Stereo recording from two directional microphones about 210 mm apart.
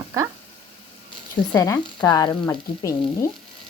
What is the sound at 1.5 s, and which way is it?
Frying, 15° left (ahead or behind).